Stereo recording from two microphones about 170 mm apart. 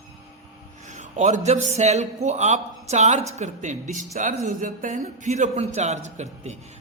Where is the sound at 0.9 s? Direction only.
45° right (ahead or behind).